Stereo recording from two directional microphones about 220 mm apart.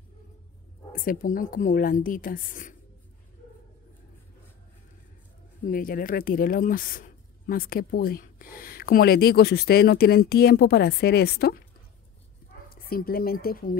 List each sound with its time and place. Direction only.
0.9 s a woman's voice: 40° left (ahead or behind)
5.6 s speech: 40° left (ahead or behind)
12.6 s speech: 40° left (ahead or behind)